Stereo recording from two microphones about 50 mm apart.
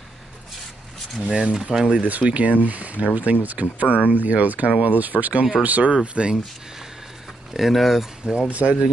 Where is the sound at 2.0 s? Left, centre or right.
Right.